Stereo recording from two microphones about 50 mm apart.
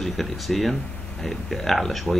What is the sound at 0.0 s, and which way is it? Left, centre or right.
Speech, centre.